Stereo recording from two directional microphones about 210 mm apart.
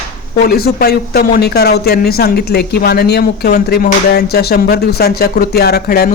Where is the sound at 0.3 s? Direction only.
45° left (ahead or behind).